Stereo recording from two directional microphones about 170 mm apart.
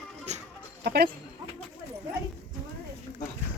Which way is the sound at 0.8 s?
70° right (ahead or behind).